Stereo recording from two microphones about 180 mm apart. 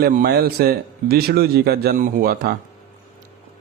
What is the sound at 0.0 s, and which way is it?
Speech, 55° right (ahead or behind).